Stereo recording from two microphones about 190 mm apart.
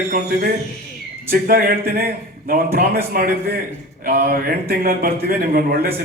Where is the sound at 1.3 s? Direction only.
50° right (ahead or behind).